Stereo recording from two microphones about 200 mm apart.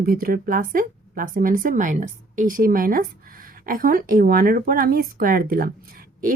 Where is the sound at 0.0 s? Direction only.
45° right (ahead or behind).